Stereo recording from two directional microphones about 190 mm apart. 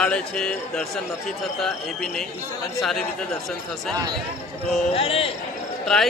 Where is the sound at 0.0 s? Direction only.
5° left (ahead or behind).